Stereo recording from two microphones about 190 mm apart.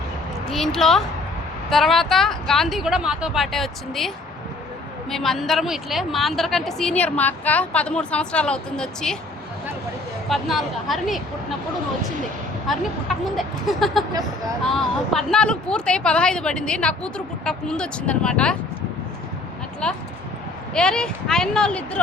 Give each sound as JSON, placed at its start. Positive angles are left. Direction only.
{"t": 0.5, "sound": "a woman's voice", "side_deg": 0}
{"t": 5.1, "sound": "a woman's voice", "side_deg": 0}
{"t": 10.2, "sound": "a woman's voice", "side_deg": 0}
{"t": 13.3, "sound": "a woman's voice", "side_deg": 0}
{"t": 14.1, "sound": "speech", "side_deg": -20}
{"t": 14.7, "sound": "a woman's voice", "side_deg": 0}
{"t": 19.8, "sound": "a woman's voice", "side_deg": 5}